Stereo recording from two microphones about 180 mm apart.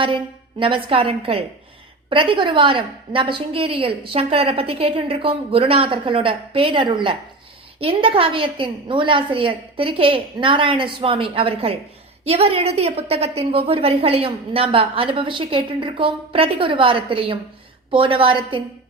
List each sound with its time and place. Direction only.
0.6 s a woman's voice: 30° right (ahead or behind)